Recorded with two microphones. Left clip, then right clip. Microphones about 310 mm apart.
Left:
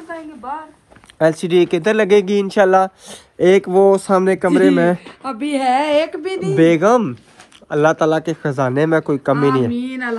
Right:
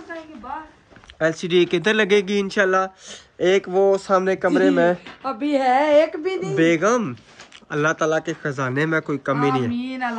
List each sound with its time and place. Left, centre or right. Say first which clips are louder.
1.2 s speech: left 5 dB; centre
5.2 s a sound: left 1 dB; left
6.6 s speech: left 6 dB; centre